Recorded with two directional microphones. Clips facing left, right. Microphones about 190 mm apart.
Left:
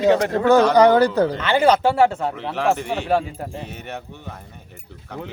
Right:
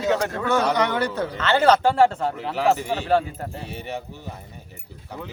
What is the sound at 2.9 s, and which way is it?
Speech, 10° left (ahead or behind).